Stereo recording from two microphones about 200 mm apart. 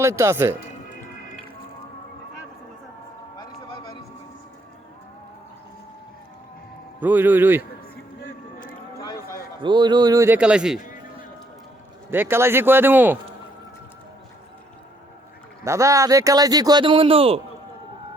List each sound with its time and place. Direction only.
0.0 s a man's voice: 15° right (ahead or behind)
7.0 s a man's voice: 10° right (ahead or behind)
9.6 s a man's voice: 20° right (ahead or behind); by 10.8 s 5° right (ahead or behind)
10.8 s a sound: 45° left (ahead or behind)
12.1 s a man's voice: 10° right (ahead or behind)
15.6 s a man's voice: 15° right (ahead or behind)